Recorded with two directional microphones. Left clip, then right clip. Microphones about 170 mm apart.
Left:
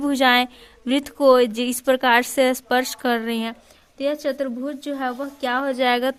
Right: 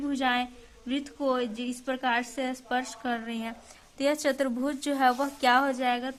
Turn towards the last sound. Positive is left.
turn(degrees=35)  # may be behind; listen again after turning